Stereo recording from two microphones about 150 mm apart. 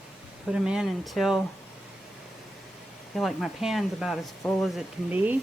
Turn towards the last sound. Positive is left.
turn(degrees=-10)  # may be behind; listen again after turning